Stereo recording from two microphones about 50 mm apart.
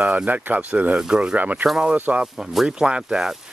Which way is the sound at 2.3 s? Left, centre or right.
Centre.